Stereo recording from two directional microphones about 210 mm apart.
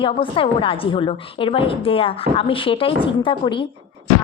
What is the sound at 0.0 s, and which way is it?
Speech, 25° left (ahead or behind).